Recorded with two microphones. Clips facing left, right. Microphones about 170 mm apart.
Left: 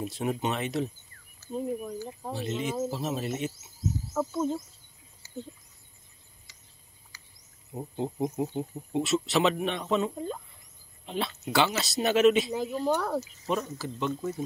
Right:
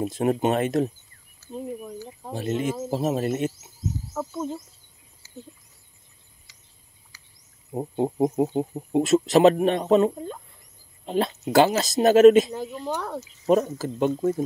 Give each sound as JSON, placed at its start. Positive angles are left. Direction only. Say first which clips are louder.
{"t": 0.0, "sound": "speech", "louder": "right 7 dB", "side_deg": -50}
{"t": 1.5, "sound": "speech", "louder": "left 1 dB", "side_deg": 5}
{"t": 2.3, "sound": "speech", "louder": "right 5 dB", "side_deg": -50}
{"t": 4.1, "sound": "speech", "louder": "left 3 dB", "side_deg": 0}
{"t": 7.7, "sound": "speech", "louder": "right 8 dB", "side_deg": -50}
{"t": 12.4, "sound": "speech", "louder": "left 3 dB", "side_deg": 5}
{"t": 13.5, "sound": "speech", "louder": "right 11 dB", "side_deg": -45}